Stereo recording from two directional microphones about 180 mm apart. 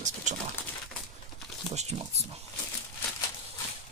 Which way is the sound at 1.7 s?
35° right (ahead or behind).